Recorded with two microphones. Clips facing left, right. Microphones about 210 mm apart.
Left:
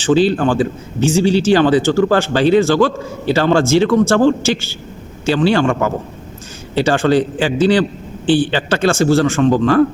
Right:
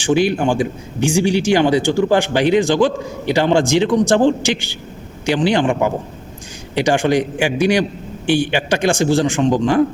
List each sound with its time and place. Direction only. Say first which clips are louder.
0.0 s a man's voice: left 2 dB; 15° right (ahead or behind)